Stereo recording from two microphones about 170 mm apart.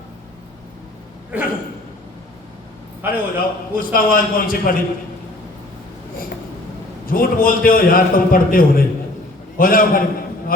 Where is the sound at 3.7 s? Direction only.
55° left (ahead or behind).